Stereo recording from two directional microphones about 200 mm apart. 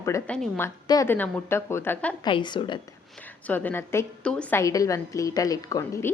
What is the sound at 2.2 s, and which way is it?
Speech, 20° left (ahead or behind).